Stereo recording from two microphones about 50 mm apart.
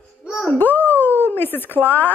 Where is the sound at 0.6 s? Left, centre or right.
Left.